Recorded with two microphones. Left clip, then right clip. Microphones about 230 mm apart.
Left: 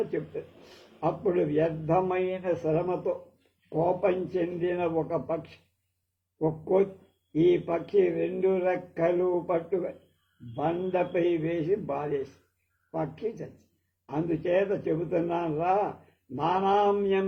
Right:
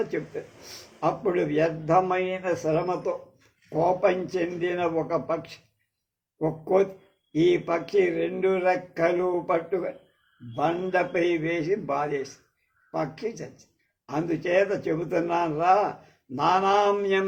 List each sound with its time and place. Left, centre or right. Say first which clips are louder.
0.9 s a man's voice: right 2 dB; right